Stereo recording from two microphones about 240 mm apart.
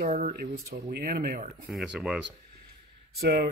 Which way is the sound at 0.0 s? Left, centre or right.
Right.